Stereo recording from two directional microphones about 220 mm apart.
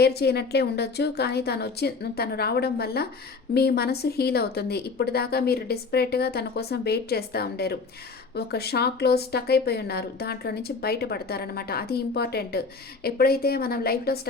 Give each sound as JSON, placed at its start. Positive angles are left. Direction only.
{"t": 0.0, "sound": "speech", "side_deg": 45}